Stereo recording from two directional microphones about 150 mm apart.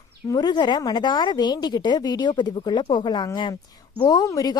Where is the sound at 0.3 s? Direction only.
25° left (ahead or behind).